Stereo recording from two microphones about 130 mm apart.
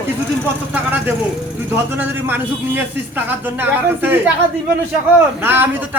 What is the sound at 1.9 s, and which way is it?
A man's voice, 15° right (ahead or behind).